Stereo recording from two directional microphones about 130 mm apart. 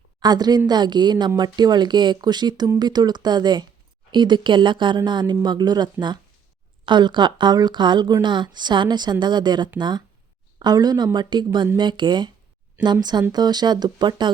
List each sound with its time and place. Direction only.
0.2 s a woman's voice: 30° right (ahead or behind)